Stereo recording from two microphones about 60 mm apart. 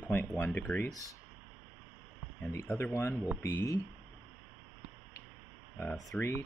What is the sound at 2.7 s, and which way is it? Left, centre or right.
Speech, left.